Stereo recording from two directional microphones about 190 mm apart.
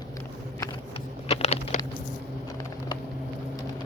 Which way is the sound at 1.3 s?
35° left (ahead or behind).